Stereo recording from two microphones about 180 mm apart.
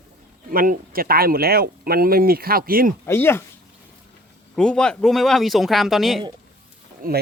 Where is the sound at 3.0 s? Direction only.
15° left (ahead or behind).